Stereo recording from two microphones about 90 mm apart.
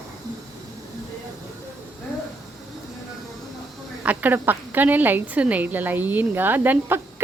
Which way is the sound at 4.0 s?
20° right (ahead or behind).